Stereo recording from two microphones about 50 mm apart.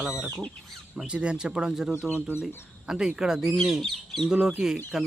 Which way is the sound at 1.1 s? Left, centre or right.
Right.